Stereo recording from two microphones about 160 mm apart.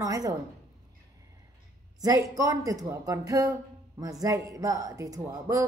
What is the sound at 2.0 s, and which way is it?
A woman's voice, 20° right (ahead or behind).